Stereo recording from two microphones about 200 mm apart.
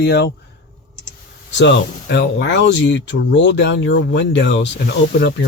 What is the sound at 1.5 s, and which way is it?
Speech, 65° left (ahead or behind).